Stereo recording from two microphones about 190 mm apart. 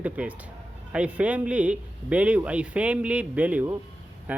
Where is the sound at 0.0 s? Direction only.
5° right (ahead or behind).